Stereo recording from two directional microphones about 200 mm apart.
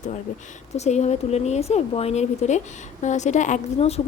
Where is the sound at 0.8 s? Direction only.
35° left (ahead or behind).